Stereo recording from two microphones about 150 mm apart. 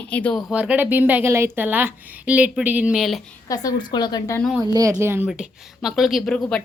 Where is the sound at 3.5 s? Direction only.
25° left (ahead or behind).